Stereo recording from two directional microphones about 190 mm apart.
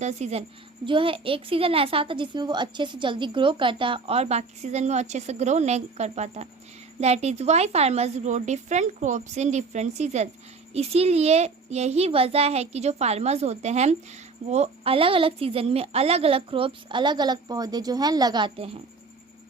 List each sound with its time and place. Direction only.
0.0 s a woman's voice: 35° right (ahead or behind)